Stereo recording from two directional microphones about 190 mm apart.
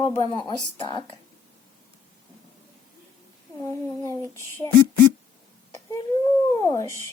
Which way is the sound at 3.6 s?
15° left (ahead or behind).